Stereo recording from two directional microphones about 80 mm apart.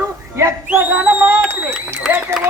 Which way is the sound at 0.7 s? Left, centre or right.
Right.